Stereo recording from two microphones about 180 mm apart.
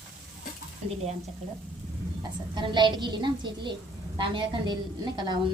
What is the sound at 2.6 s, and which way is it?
A woman's voice, 25° right (ahead or behind).